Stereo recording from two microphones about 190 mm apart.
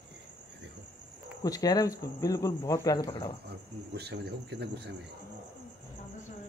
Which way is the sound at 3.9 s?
60° right (ahead or behind).